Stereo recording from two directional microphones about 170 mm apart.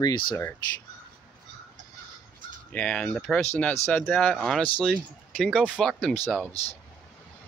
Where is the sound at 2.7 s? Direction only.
5° left (ahead or behind).